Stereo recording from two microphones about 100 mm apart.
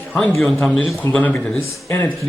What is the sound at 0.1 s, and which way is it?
Speech, 5° left (ahead or behind).